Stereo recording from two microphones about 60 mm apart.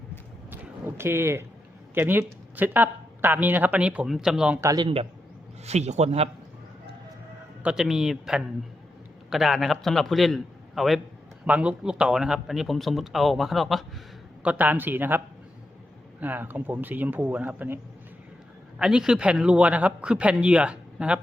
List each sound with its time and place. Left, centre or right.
0.9 s speech: right
2.0 s speech: right
4.0 s speech: centre
7.6 s a man's voice: centre
7.9 s speech: centre
11.4 s a man's voice: right
11.8 s speech: centre
14.4 s speech: right
16.2 s speech: right
18.8 s a man's voice: centre